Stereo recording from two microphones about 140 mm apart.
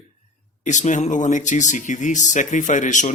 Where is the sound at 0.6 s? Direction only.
60° left (ahead or behind).